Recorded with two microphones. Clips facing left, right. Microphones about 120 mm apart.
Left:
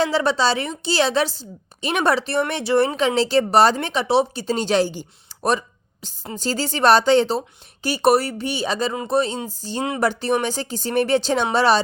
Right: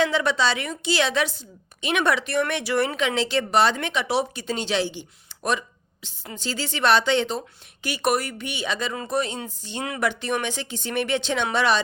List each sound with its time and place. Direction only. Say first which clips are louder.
0.0 s a woman's voice: left 3 dB; 35° left (ahead or behind)